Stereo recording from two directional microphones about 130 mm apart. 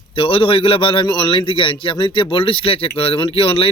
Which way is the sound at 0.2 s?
45° left (ahead or behind).